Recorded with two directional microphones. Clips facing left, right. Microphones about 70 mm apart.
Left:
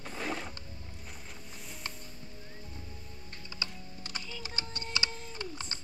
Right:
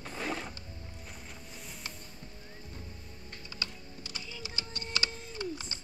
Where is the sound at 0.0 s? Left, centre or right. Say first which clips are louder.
Even; centre.